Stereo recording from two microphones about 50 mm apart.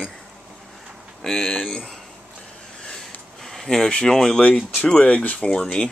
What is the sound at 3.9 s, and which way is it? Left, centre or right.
Speech, centre.